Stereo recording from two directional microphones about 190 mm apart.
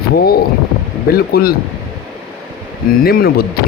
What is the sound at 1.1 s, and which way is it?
Speech, 55° left (ahead or behind).